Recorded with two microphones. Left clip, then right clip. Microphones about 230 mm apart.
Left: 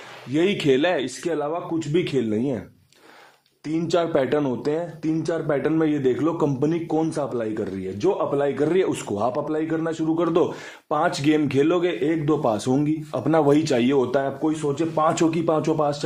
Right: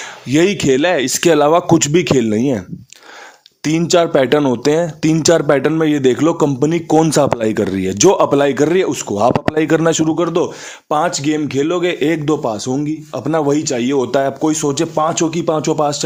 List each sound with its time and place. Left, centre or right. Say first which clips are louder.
0.3 s speech: right 7 dB; right
1.2 s speech: right 14 dB; right
1.9 s speech: right 9 dB; right
11.1 s speech: right 3 dB; centre
11.9 s speech: right 7 dB; right
12.4 s speech: right 3 dB; centre
14.9 s speech: right 5 dB; right